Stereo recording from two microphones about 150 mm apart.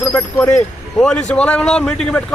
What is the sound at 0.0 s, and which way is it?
Speech, 20° left (ahead or behind).